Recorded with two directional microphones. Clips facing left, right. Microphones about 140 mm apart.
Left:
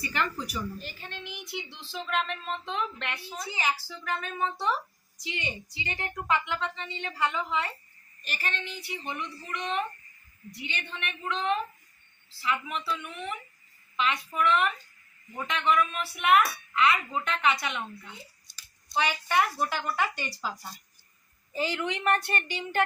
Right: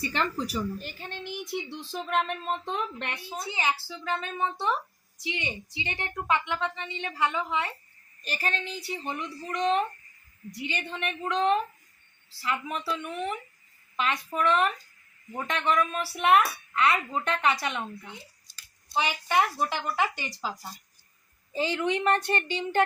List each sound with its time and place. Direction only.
0.1 s a woman's voice: 30° right (ahead or behind)
0.8 s speech: 50° right (ahead or behind)
3.5 s a woman's voice: 25° right (ahead or behind)
8.2 s speech: 40° right (ahead or behind)
12.8 s speech: 35° right (ahead or behind)
18.9 s a woman's voice: 20° right (ahead or behind)